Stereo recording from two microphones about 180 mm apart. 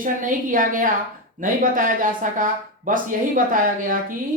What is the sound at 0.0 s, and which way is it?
Speech, 45° right (ahead or behind).